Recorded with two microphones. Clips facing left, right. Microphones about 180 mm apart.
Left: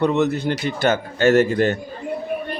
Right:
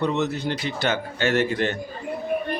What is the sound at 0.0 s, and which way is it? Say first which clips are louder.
A man's voice: left 5 dB; 55° left (ahead or behind).